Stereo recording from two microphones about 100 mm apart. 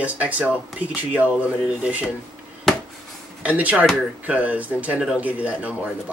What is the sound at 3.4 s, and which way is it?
Speech, 15° right (ahead or behind).